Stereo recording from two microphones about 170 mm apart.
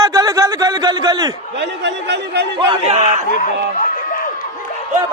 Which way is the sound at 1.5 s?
90° right.